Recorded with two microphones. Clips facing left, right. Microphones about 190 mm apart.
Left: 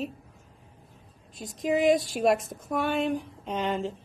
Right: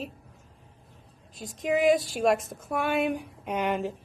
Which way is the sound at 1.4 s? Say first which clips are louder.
Even; centre (ahead or behind).